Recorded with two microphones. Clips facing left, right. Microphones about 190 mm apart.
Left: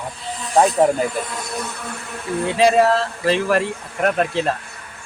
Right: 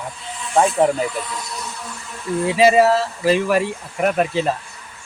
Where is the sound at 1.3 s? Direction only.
55° left (ahead or behind).